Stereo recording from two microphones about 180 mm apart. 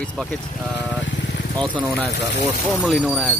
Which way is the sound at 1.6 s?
10° left (ahead or behind).